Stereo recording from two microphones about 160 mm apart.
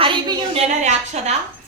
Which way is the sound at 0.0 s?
30° right (ahead or behind).